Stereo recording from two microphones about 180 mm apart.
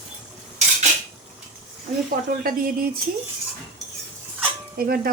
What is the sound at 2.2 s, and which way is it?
Speech, 55° right (ahead or behind).